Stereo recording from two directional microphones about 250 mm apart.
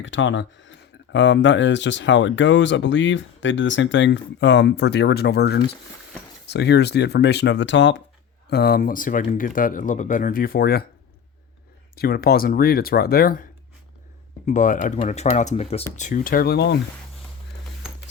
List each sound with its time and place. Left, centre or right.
0.0 s speech: left
11.9 s speech: left
14.4 s speech: left